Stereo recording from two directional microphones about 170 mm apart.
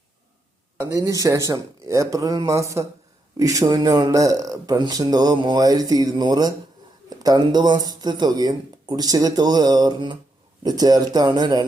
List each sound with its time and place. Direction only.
0.8 s speech: 20° right (ahead or behind)